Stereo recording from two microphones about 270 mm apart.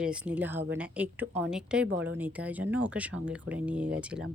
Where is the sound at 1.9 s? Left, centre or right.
Right.